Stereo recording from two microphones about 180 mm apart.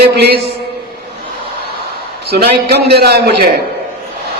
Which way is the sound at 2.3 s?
65° right (ahead or behind).